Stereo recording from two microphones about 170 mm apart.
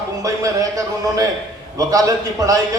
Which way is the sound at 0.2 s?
20° right (ahead or behind).